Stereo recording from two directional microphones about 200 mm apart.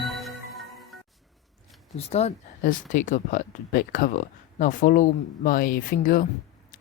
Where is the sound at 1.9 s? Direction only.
30° left (ahead or behind).